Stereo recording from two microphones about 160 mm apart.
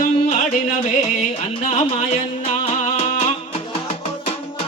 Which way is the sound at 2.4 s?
40° left (ahead or behind).